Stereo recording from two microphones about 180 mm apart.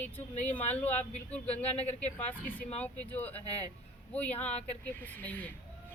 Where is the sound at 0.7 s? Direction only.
10° left (ahead or behind).